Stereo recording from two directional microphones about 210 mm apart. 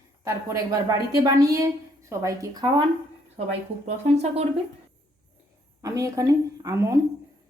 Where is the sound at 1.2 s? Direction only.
15° right (ahead or behind).